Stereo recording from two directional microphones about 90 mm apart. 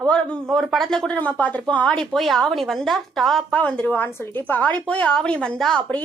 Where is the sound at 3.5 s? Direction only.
15° left (ahead or behind).